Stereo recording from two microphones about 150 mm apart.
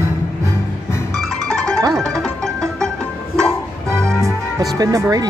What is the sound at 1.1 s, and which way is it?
Music, centre (ahead or behind).